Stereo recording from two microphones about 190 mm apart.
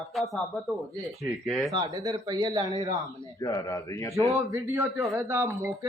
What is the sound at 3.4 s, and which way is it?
Speech, 20° left (ahead or behind).